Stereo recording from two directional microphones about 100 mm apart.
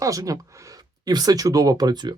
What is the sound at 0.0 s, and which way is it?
Speech, 35° right (ahead or behind).